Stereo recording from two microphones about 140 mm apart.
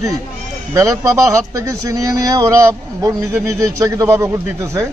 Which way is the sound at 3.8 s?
20° right (ahead or behind).